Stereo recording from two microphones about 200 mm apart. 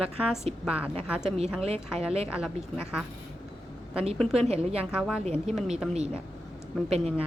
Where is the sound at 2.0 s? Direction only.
30° right (ahead or behind).